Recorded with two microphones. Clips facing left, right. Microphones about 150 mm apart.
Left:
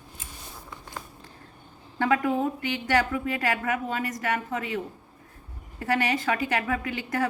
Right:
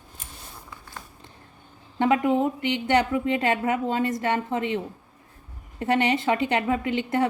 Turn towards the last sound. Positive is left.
turn(degrees=-25)  # may be behind; listen again after turning